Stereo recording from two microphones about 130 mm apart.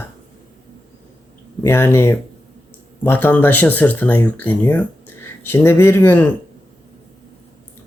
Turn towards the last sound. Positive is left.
turn(degrees=15)  # may be behind; listen again after turning